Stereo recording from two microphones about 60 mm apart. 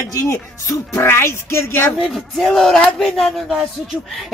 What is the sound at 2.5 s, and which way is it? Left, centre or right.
Speech, centre.